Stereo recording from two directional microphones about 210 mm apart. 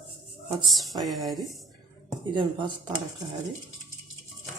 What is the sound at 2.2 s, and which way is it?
Speech, 20° right (ahead or behind).